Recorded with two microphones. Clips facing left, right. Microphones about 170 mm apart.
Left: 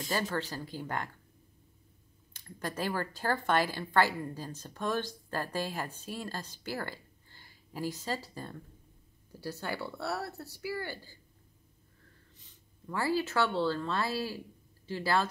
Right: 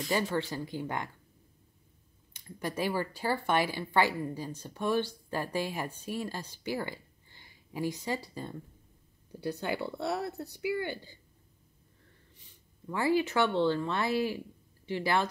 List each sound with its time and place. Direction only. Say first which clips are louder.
0.1 s speech: right 3 dB; 15° right (ahead or behind)
2.3 s speech: right 2 dB; 15° right (ahead or behind)
12.8 s speech: right 3 dB; 20° right (ahead or behind)